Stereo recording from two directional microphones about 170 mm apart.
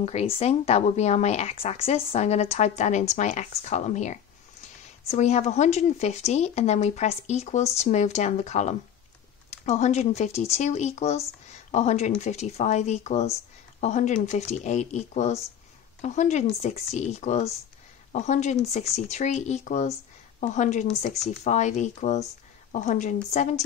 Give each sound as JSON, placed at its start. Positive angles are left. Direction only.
{"t": 0.0, "sound": "a woman's voice", "side_deg": 40}
{"t": 21.1, "sound": "speech", "side_deg": 0}
{"t": 21.5, "sound": "a woman's voice", "side_deg": 45}